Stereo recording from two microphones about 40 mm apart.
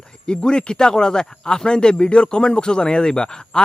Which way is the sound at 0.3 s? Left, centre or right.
Centre.